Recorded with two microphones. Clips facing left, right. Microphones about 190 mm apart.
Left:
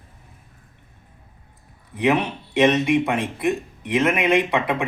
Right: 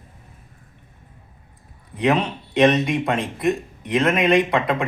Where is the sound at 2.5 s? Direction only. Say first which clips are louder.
Even; 10° left (ahead or behind).